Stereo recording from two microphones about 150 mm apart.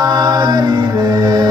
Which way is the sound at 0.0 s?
25° right (ahead or behind).